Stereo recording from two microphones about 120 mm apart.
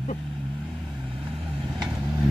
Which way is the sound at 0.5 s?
Centre (ahead or behind).